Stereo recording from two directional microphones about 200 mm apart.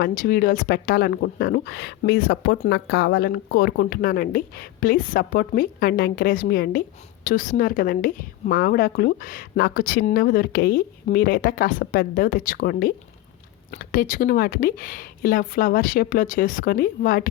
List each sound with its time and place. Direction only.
0.0 s speech: 45° left (ahead or behind)